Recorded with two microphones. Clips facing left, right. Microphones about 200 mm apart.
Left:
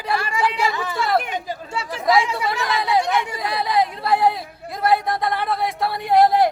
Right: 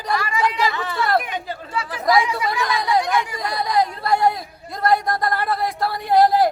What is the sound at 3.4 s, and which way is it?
Speech, 5° left (ahead or behind).